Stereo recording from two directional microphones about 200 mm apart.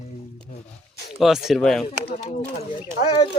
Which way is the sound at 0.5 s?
40° left (ahead or behind).